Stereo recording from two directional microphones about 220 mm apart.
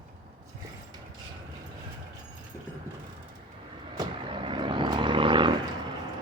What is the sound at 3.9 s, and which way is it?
Vehicle, 20° right (ahead or behind).